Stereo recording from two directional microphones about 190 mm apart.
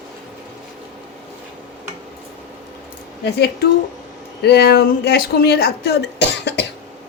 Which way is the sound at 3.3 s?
60° left (ahead or behind).